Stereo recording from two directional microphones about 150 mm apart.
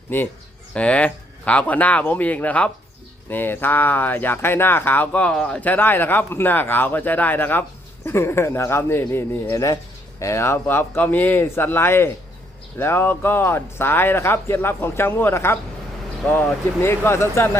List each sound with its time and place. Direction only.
0.1 s speech: 15° left (ahead or behind)